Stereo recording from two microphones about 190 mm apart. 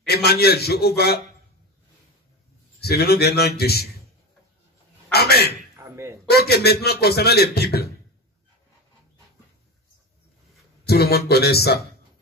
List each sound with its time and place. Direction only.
0.0 s a man's voice: 55° left (ahead or behind)
2.8 s a man's voice: 55° left (ahead or behind)
5.1 s a sound: 55° left (ahead or behind)
5.8 s a sound: 15° right (ahead or behind)
6.2 s a man's voice: 55° left (ahead or behind)
10.9 s a man's voice: 55° left (ahead or behind)